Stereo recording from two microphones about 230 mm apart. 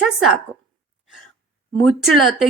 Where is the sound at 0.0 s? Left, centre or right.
Centre.